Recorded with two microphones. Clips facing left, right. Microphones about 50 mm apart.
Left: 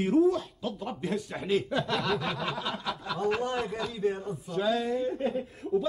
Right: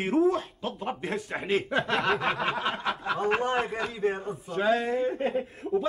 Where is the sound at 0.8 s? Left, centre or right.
Right.